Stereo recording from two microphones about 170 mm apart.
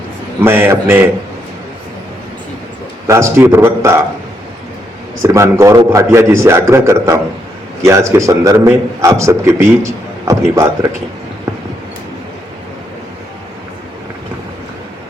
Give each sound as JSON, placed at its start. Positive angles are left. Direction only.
{"t": 0.3, "sound": "a man's voice", "side_deg": -10}
{"t": 3.1, "sound": "a man's voice", "side_deg": -15}
{"t": 5.2, "sound": "a man's voice", "side_deg": -15}